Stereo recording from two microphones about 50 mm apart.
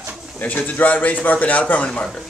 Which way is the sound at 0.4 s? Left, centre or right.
Left.